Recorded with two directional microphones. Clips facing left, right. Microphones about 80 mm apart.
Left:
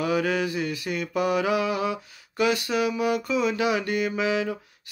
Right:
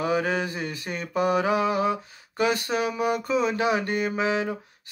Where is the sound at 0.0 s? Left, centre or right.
Right.